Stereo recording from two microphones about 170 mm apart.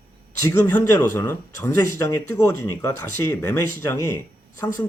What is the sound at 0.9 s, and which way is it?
Speech, 15° left (ahead or behind).